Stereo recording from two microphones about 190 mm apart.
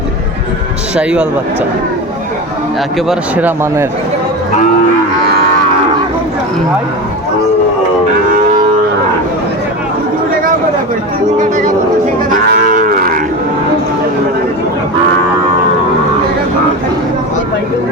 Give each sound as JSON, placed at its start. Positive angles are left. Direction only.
{"t": 0.9, "sound": "speech", "side_deg": -5}
{"t": 3.1, "sound": "speech", "side_deg": -10}
{"t": 11.3, "sound": "a sound", "side_deg": -40}
{"t": 12.5, "sound": "livestock", "side_deg": -45}